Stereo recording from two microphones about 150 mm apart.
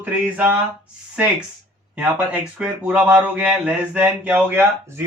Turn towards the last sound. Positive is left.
turn(degrees=-15)  # may be behind; listen again after turning